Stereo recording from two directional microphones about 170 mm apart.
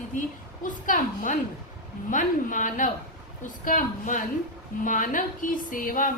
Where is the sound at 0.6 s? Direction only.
50° left (ahead or behind).